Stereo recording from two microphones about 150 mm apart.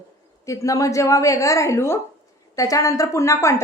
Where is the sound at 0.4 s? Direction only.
20° left (ahead or behind).